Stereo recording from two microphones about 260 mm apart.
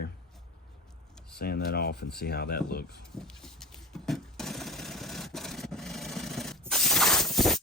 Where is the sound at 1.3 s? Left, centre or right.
Left.